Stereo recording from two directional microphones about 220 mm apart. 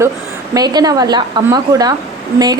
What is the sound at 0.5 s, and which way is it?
A woman's voice, 20° right (ahead or behind).